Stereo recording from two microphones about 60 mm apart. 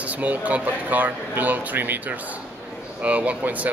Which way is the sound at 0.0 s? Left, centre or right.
Right.